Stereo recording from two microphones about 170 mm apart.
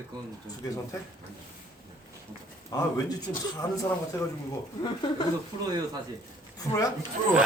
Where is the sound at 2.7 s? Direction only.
20° left (ahead or behind).